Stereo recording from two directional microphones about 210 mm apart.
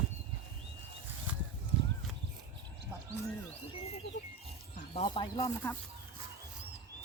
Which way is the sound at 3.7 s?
30° left (ahead or behind).